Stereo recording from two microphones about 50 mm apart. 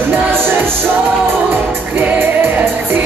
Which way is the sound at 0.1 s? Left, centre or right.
Right.